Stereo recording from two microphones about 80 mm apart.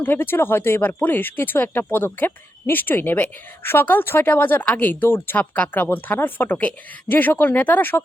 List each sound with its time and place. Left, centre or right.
0.0 s a woman's voice: left